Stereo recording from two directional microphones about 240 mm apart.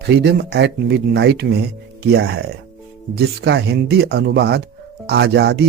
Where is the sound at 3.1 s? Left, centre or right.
Right.